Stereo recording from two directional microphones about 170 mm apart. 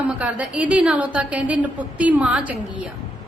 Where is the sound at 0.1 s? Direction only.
10° right (ahead or behind).